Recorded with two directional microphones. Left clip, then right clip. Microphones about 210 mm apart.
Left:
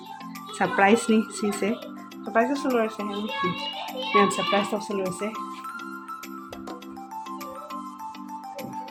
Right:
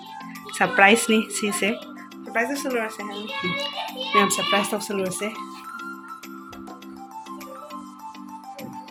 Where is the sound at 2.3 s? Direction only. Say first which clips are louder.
Left 2 dB; 35° left (ahead or behind).